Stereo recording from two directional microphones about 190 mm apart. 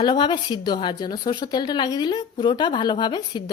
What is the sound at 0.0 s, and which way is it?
Speech, 25° left (ahead or behind).